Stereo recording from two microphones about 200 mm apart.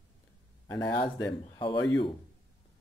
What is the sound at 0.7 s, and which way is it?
Speech, 20° left (ahead or behind).